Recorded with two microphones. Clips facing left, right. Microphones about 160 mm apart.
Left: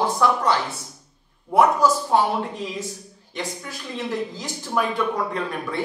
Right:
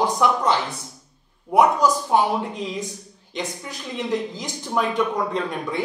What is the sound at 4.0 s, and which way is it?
A woman's voice, 15° right (ahead or behind).